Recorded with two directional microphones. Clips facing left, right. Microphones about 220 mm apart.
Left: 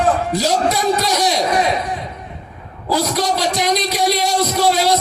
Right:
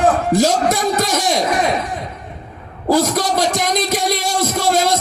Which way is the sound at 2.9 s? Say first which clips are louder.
Right 3 dB; 50° right (ahead or behind).